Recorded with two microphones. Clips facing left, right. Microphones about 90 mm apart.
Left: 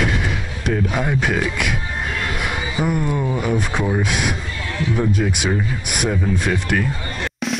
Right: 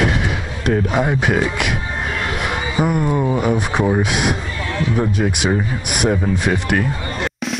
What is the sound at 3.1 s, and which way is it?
Speech, 20° right (ahead or behind).